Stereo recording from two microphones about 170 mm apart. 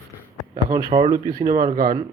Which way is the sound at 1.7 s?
60° right (ahead or behind).